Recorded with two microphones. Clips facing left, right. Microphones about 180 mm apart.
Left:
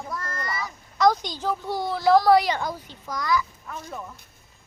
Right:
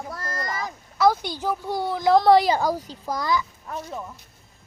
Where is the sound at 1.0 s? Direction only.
10° right (ahead or behind).